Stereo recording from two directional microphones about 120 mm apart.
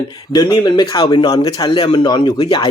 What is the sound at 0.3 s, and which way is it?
Speech, 35° left (ahead or behind).